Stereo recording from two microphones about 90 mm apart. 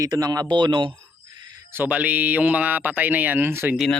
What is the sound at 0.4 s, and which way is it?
Speech, 65° right (ahead or behind).